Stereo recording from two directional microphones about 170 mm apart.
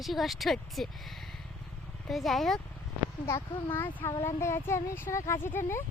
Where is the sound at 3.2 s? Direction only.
15° left (ahead or behind).